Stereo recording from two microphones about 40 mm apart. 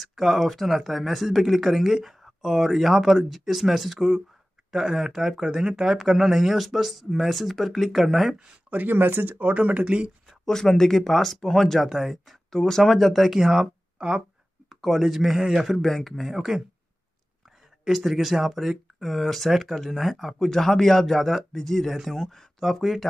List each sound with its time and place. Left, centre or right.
0.0 s speech: centre
8.6 s a sound: right
8.9 s speech: right
9.4 s speech: right
10.4 s speech: centre
12.4 s speech: centre
13.9 s speech: centre
14.7 s speech: centre
15.8 s speech: centre
17.8 s speech: centre